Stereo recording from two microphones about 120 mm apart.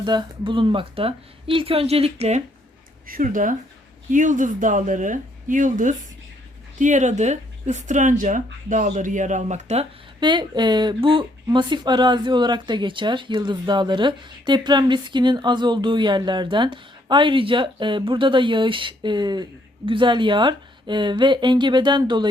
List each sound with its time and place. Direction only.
0.0 s speech: 40° right (ahead or behind); by 2.4 s 65° right (ahead or behind)
4.1 s speech: 90° right; by 9.8 s 70° right (ahead or behind)
10.2 s speech: 40° right (ahead or behind)